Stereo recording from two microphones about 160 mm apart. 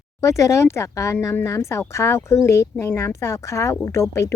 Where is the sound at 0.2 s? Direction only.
20° left (ahead or behind).